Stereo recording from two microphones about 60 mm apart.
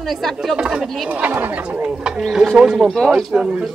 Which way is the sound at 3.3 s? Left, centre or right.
Centre.